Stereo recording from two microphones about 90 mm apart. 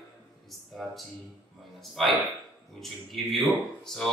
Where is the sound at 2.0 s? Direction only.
5° left (ahead or behind).